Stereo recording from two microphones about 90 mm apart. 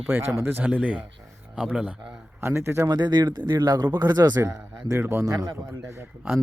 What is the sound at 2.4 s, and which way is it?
Speech, 30° right (ahead or behind).